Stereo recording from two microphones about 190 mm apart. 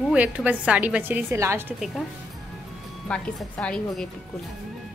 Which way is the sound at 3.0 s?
5° left (ahead or behind).